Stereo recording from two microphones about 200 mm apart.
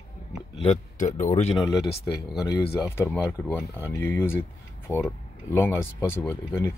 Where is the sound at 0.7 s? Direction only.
35° left (ahead or behind).